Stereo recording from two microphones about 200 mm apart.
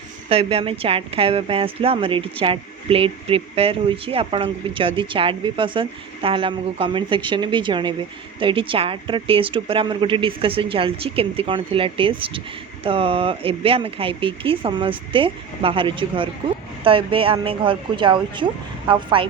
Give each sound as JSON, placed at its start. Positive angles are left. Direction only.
{"t": 0.3, "sound": "a woman's voice", "side_deg": -30}